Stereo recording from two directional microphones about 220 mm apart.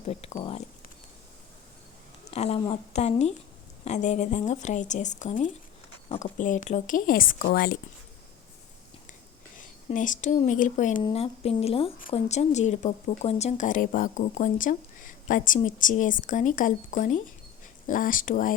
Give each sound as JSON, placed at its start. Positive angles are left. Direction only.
{"t": 0.0, "sound": "a sound", "side_deg": 30}
{"t": 2.3, "sound": "speech", "side_deg": 30}
{"t": 9.6, "sound": "speech", "side_deg": 35}